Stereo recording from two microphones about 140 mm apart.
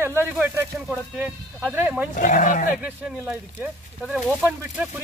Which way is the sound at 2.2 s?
70° left (ahead or behind).